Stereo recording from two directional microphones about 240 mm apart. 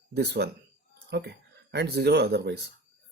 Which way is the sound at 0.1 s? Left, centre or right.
Right.